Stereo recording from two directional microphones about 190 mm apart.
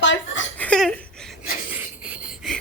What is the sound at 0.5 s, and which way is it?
Laughter, 5° left (ahead or behind).